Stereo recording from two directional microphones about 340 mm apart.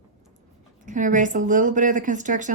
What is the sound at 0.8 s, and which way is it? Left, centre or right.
Speech, right.